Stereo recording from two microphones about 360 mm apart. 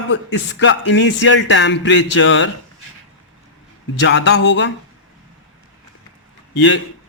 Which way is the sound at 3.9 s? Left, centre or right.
Left.